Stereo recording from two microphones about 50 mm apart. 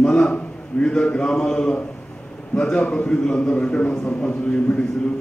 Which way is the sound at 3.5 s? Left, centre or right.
Left.